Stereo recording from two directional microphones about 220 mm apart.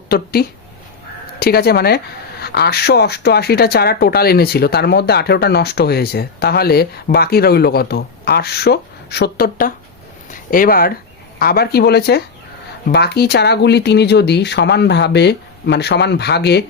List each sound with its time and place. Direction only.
0.1 s speech: 45° left (ahead or behind)